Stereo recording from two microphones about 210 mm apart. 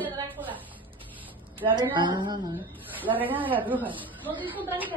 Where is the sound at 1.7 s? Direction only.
20° right (ahead or behind).